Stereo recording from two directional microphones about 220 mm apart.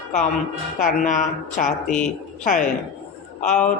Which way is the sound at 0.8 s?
35° left (ahead or behind).